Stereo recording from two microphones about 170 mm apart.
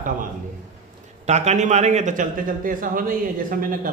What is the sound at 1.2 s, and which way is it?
A man's voice, 45° right (ahead or behind).